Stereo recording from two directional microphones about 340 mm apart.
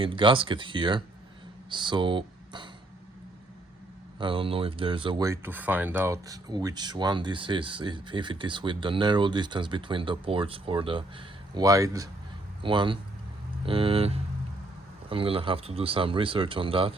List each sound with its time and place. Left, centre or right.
0.0 s speech: centre
4.2 s speech: centre